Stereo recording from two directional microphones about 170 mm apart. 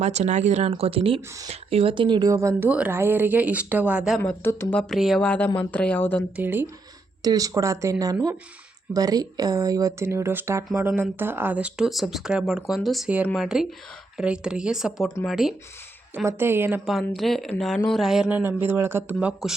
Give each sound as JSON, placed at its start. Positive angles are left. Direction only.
{"t": 0.0, "sound": "speech", "side_deg": -40}
{"t": 4.2, "sound": "speech", "side_deg": 10}
{"t": 6.3, "sound": "speech", "side_deg": -10}
{"t": 16.1, "sound": "speech", "side_deg": -15}